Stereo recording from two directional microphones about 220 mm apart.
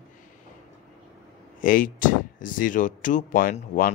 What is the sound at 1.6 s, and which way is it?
Speech, 40° left (ahead or behind).